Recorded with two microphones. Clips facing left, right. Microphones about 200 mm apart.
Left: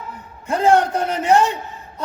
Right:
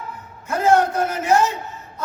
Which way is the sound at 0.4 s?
30° left (ahead or behind).